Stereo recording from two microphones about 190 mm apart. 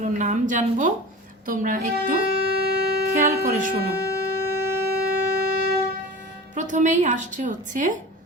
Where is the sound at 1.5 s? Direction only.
45° right (ahead or behind).